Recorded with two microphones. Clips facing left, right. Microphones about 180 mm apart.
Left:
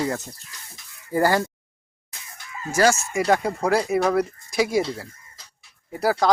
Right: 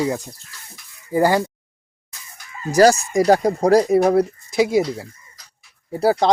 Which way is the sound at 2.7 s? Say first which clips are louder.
Right 6 dB; 35° right (ahead or behind).